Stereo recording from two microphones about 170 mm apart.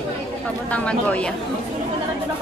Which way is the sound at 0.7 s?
10° left (ahead or behind).